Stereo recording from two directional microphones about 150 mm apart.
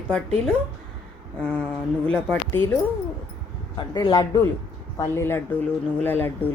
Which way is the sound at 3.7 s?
30° left (ahead or behind).